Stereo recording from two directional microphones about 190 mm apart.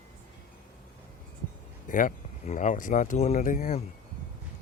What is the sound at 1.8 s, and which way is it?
Speech, 45° left (ahead or behind).